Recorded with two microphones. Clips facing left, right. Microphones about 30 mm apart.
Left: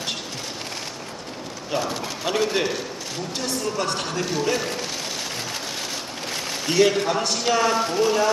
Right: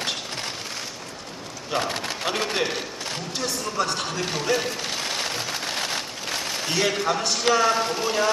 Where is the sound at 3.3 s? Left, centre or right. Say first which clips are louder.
Left 1 dB; centre.